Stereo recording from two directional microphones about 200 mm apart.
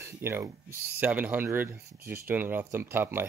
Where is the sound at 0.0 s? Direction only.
10° right (ahead or behind).